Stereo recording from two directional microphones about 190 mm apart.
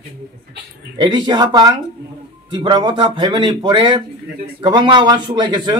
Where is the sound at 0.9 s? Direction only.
25° right (ahead or behind).